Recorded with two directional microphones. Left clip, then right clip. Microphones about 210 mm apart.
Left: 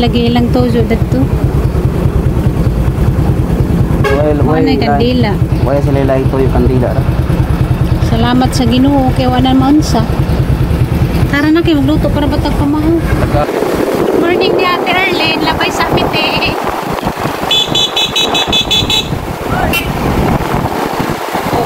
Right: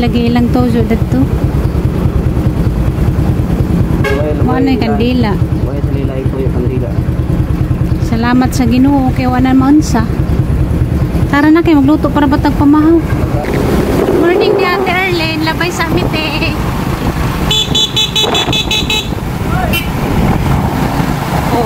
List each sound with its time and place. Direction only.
0.0 s speech: 10° right (ahead or behind)
4.6 s speech: 15° right (ahead or behind)
8.3 s speech: 15° right (ahead or behind)
11.3 s a woman's voice: 25° right (ahead or behind)
14.2 s speech: 5° right (ahead or behind)